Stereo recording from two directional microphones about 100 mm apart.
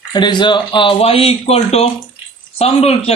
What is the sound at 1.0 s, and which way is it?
Speech, 80° left.